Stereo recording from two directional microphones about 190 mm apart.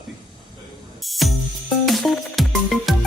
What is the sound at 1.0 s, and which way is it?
Music, centre (ahead or behind).